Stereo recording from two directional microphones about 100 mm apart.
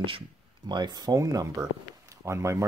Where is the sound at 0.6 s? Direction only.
45° right (ahead or behind).